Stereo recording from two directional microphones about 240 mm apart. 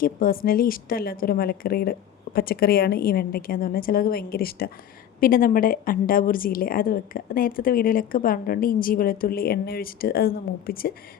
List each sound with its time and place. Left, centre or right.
0.0 s a woman's voice: left